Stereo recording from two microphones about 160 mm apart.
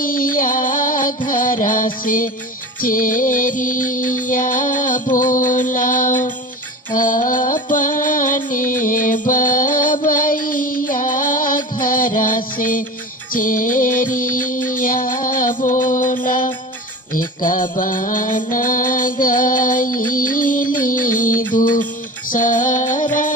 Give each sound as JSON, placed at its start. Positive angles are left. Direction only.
{"t": 0.0, "sound": "music", "side_deg": 60}